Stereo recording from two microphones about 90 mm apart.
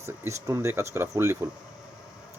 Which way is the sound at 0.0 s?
35° right (ahead or behind).